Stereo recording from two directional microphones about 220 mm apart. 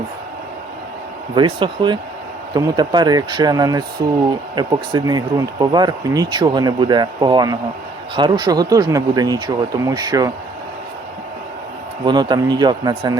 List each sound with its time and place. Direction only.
1.4 s speech: 20° right (ahead or behind)
12.0 s speech: 20° right (ahead or behind)